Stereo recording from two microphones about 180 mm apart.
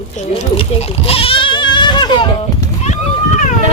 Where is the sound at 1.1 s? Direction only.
30° left (ahead or behind).